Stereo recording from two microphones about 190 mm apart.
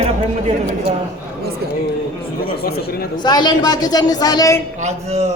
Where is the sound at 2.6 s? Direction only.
55° left (ahead or behind).